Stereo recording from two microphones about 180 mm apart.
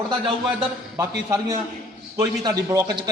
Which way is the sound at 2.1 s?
20° right (ahead or behind).